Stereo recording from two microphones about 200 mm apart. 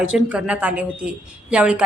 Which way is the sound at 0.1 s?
5° right (ahead or behind).